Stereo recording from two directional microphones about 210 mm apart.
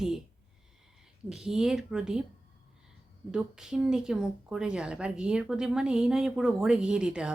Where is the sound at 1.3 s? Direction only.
Centre (ahead or behind).